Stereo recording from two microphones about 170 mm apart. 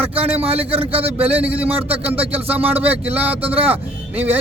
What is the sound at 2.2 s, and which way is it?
Speech, 35° right (ahead or behind).